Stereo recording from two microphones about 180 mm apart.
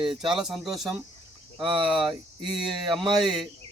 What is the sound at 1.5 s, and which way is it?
Speech, 25° right (ahead or behind).